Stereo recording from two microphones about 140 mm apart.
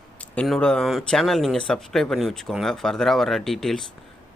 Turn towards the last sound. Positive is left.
turn(degrees=0)  # may be behind; listen again after turning